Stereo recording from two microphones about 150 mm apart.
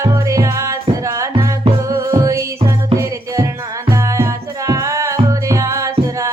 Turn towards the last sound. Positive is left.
turn(degrees=-20)  # may be behind; listen again after turning